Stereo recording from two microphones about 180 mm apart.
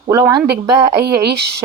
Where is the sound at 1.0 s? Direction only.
65° right (ahead or behind).